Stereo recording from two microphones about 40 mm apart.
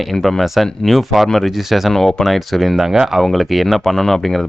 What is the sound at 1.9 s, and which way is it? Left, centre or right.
Speech, centre.